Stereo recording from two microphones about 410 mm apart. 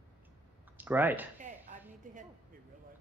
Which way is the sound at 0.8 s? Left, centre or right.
Centre.